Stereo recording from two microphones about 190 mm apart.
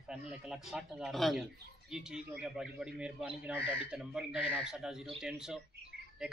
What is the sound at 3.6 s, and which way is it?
Speech, 30° left (ahead or behind).